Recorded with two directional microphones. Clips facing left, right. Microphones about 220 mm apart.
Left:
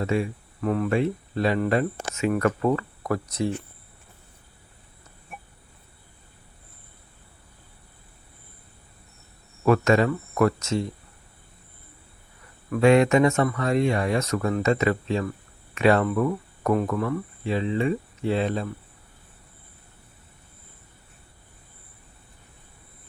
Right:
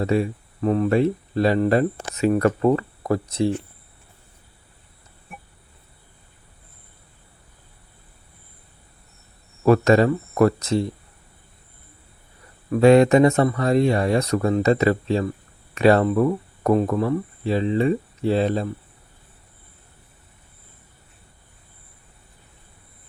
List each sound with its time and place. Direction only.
0.0 s speech: 35° right (ahead or behind)
9.6 s speech: 35° right (ahead or behind)
12.7 s speech: 35° right (ahead or behind)